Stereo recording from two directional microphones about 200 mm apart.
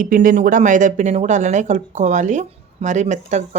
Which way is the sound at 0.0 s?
40° right (ahead or behind).